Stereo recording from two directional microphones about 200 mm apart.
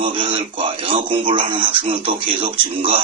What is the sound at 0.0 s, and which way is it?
Speech, 25° right (ahead or behind).